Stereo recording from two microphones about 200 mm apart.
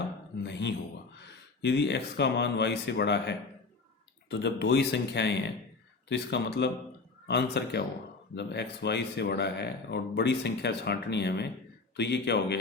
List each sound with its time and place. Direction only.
0.4 s a man's voice: 60° left (ahead or behind)